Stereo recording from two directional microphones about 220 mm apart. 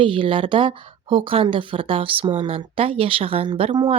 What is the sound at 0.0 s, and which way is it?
Speech, 25° right (ahead or behind).